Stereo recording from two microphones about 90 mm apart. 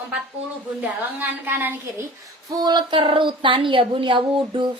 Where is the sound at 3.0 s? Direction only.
70° right (ahead or behind).